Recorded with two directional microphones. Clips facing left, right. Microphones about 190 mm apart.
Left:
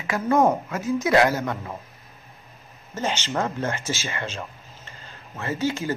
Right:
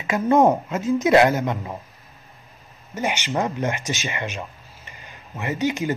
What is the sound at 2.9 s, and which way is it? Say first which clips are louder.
Speech: right 2 dB; 15° right (ahead or behind).